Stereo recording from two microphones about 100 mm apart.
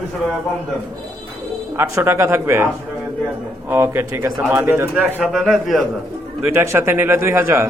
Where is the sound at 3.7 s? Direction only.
25° right (ahead or behind).